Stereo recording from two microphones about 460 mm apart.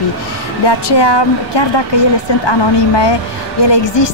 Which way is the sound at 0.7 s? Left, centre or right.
Left.